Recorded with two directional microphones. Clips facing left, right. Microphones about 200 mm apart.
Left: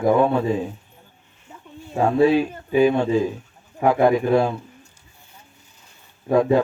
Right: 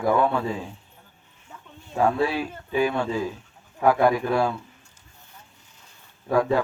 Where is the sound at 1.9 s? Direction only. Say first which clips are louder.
Left 6 dB; 20° left (ahead or behind).